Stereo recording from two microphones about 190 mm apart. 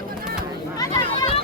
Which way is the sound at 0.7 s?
20° left (ahead or behind).